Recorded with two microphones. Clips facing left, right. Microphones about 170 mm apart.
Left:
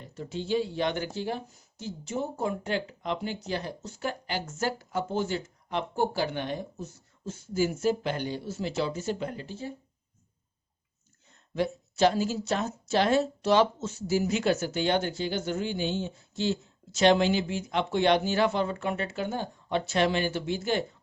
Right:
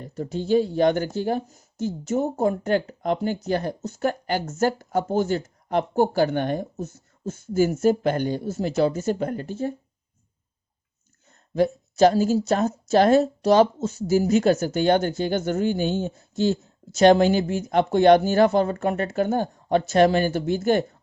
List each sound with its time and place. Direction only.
0.0 s speech: 40° right (ahead or behind)
11.5 s speech: 40° right (ahead or behind)